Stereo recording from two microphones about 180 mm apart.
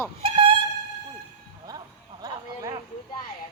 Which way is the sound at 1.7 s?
20° right (ahead or behind).